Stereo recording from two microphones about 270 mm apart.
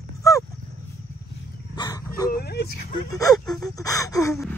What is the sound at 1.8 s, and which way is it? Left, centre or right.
Dog, centre.